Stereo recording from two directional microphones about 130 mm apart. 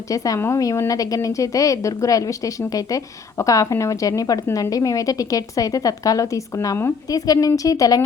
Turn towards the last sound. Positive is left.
turn(degrees=25)  # may be behind; listen again after turning